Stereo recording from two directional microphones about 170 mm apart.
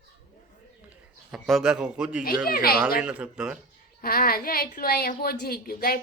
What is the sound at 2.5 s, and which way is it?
Speech, 60° left (ahead or behind).